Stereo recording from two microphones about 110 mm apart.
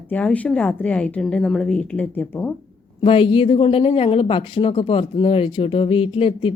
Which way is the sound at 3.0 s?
55° left (ahead or behind).